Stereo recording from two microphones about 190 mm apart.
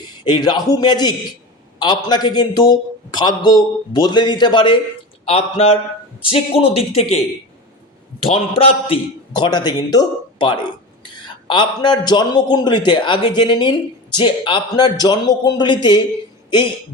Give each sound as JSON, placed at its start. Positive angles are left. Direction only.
{"t": 0.3, "sound": "a man's voice", "side_deg": 20}
{"t": 8.3, "sound": "a man's voice", "side_deg": 30}